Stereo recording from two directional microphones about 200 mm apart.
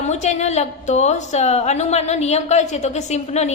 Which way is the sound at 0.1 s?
35° left (ahead or behind).